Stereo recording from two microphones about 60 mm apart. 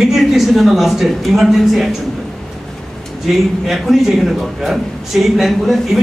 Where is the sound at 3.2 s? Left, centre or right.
Centre.